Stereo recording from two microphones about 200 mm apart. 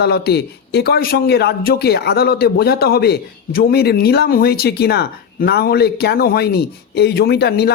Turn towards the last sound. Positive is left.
turn(degrees=55)  # may be behind; listen again after turning